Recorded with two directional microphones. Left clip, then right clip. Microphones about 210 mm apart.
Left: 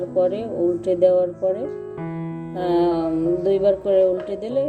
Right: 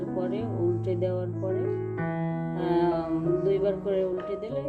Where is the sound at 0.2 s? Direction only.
20° left (ahead or behind).